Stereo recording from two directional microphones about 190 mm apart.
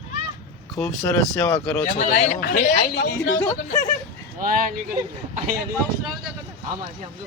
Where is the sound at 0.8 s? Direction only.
10° left (ahead or behind).